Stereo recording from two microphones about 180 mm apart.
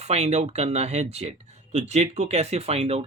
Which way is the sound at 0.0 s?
35° right (ahead or behind).